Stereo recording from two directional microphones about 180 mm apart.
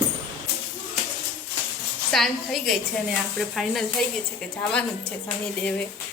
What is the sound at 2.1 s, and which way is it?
A woman's voice, centre (ahead or behind).